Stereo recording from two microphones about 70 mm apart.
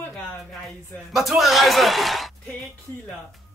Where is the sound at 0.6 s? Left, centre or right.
Centre.